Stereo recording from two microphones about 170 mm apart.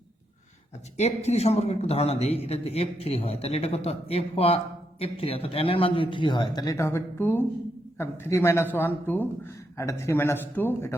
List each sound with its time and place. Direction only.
0.9 s a man's voice: 40° left (ahead or behind); by 10.9 s 10° left (ahead or behind)